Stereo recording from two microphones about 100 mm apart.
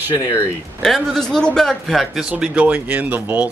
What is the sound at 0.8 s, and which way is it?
Speech, 5° left (ahead or behind).